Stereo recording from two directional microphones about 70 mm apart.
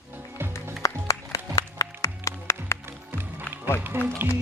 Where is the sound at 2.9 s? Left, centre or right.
Right.